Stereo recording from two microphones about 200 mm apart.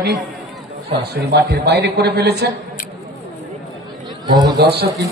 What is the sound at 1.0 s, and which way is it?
Speech, 55° right (ahead or behind).